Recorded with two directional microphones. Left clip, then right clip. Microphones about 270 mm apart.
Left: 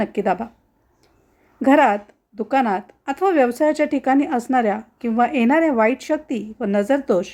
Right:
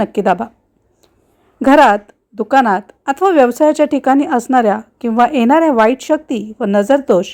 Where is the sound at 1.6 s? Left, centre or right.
Right.